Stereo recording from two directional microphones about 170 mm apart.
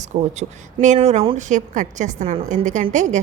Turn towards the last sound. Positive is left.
turn(degrees=-45)  # may be behind; listen again after turning